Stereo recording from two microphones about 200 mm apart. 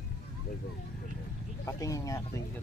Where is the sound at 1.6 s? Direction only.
15° left (ahead or behind).